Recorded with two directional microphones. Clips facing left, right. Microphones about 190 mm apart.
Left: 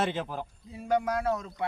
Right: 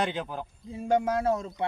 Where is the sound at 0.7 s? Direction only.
25° right (ahead or behind).